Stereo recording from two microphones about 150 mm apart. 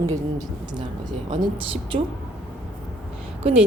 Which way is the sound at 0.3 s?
30° right (ahead or behind).